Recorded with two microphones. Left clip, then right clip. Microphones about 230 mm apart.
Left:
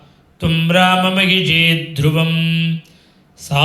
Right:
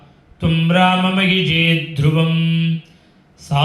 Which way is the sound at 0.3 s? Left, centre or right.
Left.